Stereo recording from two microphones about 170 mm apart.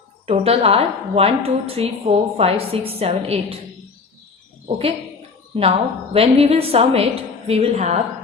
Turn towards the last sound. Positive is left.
turn(degrees=-40)  # may be behind; listen again after turning